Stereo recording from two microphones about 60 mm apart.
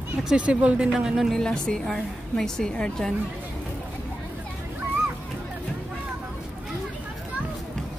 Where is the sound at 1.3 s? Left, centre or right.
Centre.